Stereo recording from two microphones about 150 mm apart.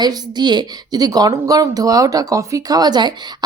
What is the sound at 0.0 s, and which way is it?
A woman's voice, 30° right (ahead or behind).